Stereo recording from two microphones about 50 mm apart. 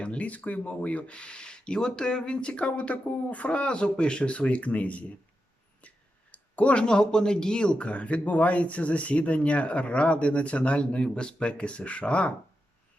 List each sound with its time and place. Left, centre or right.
0.0 s a man's voice: left
5.8 s a sound: left
6.8 s a man's voice: centre